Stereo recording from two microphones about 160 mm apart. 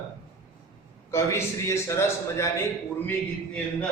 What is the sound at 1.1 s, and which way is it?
A man's voice, 15° left (ahead or behind).